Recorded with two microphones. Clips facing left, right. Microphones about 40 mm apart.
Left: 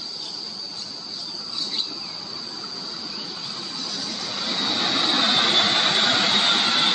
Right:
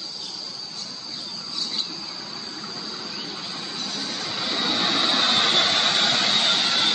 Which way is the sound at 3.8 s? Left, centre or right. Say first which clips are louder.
Right 1 dB; right.